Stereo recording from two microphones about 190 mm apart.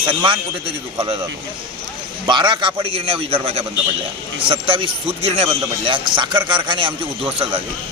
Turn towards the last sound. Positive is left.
turn(degrees=-30)  # may be behind; listen again after turning